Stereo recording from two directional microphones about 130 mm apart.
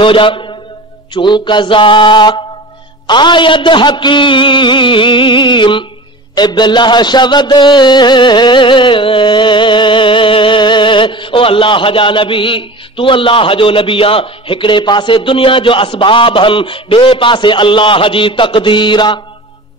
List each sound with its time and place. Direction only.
0.0 s music: 40° left (ahead or behind)